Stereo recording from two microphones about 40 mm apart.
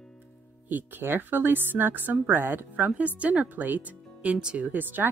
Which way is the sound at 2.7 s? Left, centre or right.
Right.